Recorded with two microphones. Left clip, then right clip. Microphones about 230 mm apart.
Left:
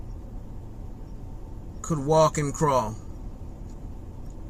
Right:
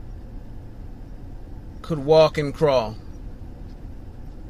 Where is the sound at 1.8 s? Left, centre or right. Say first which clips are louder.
Right 5 dB; left.